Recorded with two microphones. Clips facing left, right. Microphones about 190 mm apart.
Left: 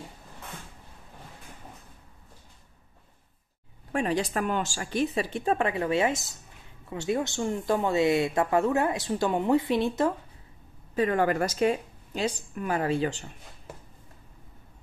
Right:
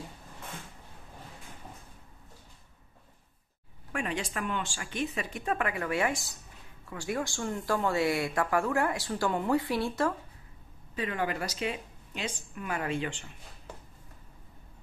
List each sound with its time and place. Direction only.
3.9 s speech: 35° left (ahead or behind)
11.0 s speech: 45° left (ahead or behind)